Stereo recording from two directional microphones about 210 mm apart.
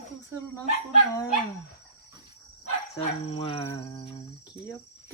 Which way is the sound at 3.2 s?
25° left (ahead or behind).